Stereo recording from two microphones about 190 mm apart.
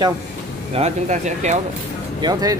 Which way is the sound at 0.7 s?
35° right (ahead or behind).